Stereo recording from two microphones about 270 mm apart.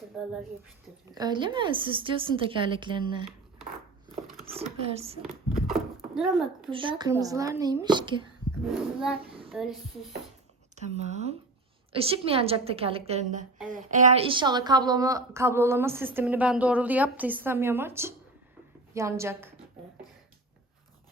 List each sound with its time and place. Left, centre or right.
1.1 s a woman's voice: centre
4.4 s a woman's voice: right
5.6 s a sound: centre
6.7 s a woman's voice: centre
8.6 s a sound: centre
10.8 s a woman's voice: right; by 19.5 s centre